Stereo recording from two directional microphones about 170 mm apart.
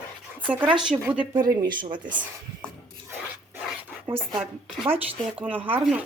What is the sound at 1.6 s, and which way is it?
Speech, 25° right (ahead or behind).